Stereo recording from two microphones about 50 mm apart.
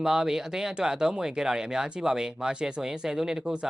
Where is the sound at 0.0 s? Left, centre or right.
Centre.